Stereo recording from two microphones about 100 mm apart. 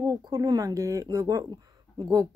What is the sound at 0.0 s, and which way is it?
Speech, 35° right (ahead or behind).